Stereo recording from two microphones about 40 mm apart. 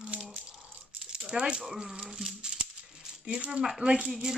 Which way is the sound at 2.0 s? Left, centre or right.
Centre.